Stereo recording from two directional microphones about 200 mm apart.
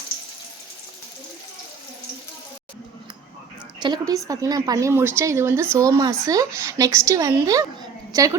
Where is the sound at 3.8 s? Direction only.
20° right (ahead or behind).